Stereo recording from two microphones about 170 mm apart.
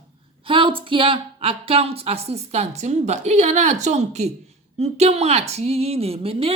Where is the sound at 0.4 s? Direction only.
30° right (ahead or behind).